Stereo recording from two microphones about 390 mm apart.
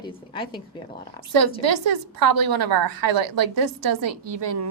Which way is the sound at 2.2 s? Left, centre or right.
Right.